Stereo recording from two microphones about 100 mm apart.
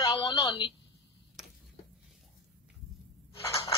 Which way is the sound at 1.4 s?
5° right (ahead or behind).